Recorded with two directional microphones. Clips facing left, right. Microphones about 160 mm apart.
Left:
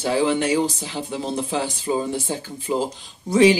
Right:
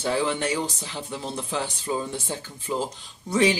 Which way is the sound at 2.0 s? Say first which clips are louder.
Left 6 dB; 35° left (ahead or behind).